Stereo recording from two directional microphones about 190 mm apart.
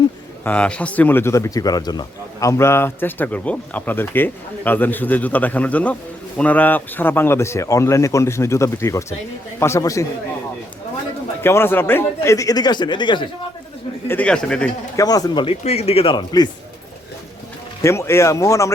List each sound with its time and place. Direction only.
0.4 s speech: 5° left (ahead or behind)
11.4 s speech: 10° left (ahead or behind)
14.1 s a man's voice: 5° left (ahead or behind)
14.9 s speech: 20° left (ahead or behind)
17.8 s speech: 15° left (ahead or behind)